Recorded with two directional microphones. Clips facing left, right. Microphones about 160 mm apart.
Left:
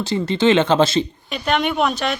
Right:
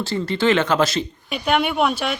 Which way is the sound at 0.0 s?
20° left (ahead or behind).